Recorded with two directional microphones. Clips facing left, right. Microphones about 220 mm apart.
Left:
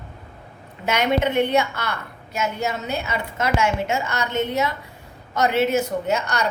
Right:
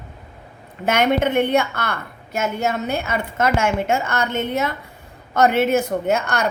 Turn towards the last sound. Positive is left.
turn(degrees=-50)  # may be behind; listen again after turning